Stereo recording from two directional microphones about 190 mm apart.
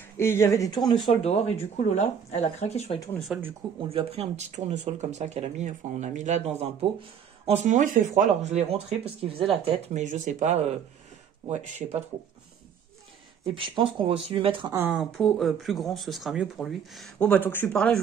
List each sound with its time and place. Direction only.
0.2 s speech: 15° left (ahead or behind)
1.0 s speech: 35° left (ahead or behind)
3.3 s speech: 5° right (ahead or behind)
3.9 s speech: 30° right (ahead or behind)
13.6 s speech: 25° right (ahead or behind)
14.8 s speech: 5° right (ahead or behind)